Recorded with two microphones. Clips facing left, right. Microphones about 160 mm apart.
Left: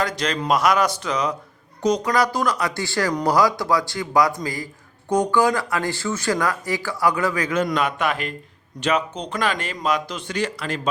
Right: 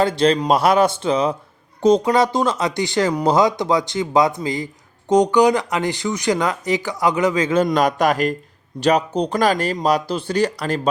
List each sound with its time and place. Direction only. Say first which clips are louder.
0.0 s speech: right 8 dB; 30° right (ahead or behind)
7.7 s speech: right 5 dB; 40° right (ahead or behind)